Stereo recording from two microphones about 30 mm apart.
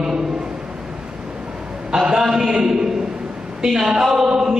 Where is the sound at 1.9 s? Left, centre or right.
Right.